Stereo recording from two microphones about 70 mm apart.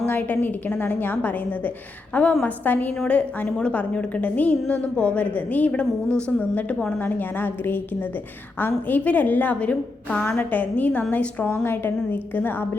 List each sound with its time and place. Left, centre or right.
0.0 s a woman's voice: left